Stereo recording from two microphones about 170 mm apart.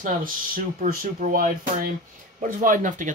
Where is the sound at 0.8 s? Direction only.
55° right (ahead or behind).